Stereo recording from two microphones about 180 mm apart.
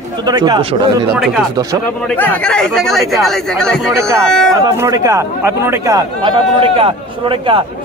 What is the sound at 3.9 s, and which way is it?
Speech, 15° right (ahead or behind).